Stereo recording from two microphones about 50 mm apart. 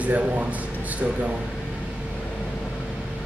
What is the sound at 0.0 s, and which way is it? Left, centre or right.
Speech, right.